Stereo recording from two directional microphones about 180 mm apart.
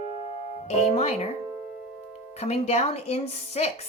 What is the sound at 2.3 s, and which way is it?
Speech, 35° left (ahead or behind).